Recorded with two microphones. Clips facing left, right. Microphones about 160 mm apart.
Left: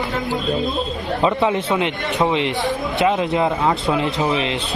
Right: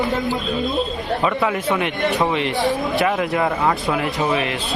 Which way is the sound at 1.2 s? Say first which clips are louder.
Left 3 dB; 25° left (ahead or behind).